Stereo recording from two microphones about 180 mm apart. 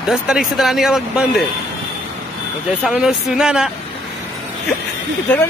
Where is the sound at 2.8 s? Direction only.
5° right (ahead or behind).